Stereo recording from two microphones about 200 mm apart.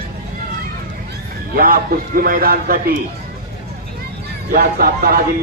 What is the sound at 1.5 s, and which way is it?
Speech, 45° right (ahead or behind).